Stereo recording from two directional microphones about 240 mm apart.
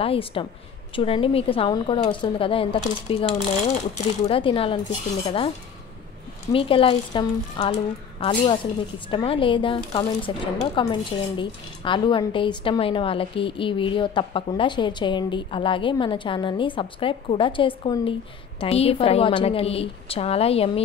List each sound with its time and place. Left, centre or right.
0.0 s speech: left
6.5 s speech: left